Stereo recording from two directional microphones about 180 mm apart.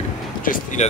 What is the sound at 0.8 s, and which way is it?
Speech, 40° left (ahead or behind).